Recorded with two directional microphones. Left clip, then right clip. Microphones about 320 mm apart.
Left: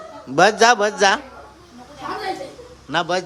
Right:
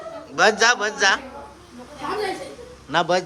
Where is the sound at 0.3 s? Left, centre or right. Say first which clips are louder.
Left 3 dB; centre.